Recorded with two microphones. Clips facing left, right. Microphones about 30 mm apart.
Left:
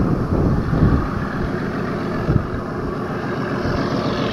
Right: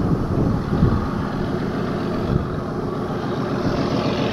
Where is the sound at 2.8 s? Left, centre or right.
Centre.